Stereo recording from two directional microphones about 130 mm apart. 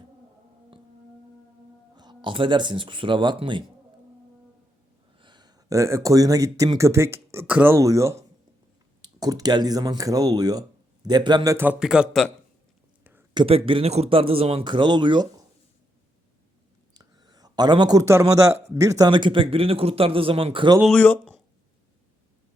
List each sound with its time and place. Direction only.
2.0 s speech: 35° right (ahead or behind)
5.2 s speech: 35° right (ahead or behind)
9.2 s speech: 30° right (ahead or behind)
11.5 s speech: 15° right (ahead or behind)
13.3 s speech: 45° right (ahead or behind)
16.9 s a sound: 30° right (ahead or behind)
18.8 s speech: 25° right (ahead or behind)
20.8 s speech: 10° left (ahead or behind)